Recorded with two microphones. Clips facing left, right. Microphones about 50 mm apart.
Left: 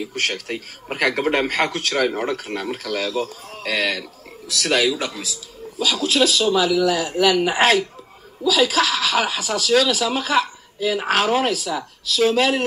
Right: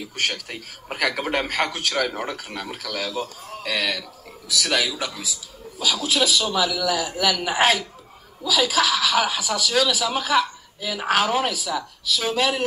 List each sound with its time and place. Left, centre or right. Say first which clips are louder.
0.3 s speech: left 4 dB; left
1.3 s speech: left 3 dB; left
2.0 s speech: left 5 dB; left
2.3 s speech: left 6 dB; left
7.5 s speech: left 3 dB; left